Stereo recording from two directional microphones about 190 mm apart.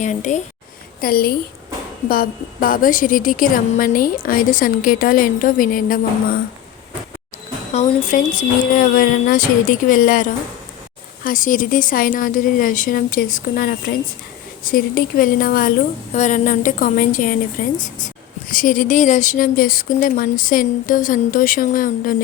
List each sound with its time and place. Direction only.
0.0 s a woman's voice: 40° left (ahead or behind)
1.0 s a woman's voice: 50° left (ahead or behind)
7.7 s a woman's voice: 40° left (ahead or behind)